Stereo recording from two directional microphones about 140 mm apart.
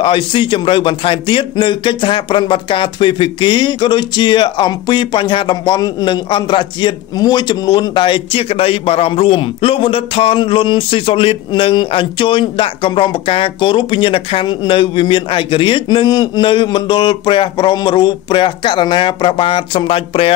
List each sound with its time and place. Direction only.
0.0 s a man's voice: 35° left (ahead or behind)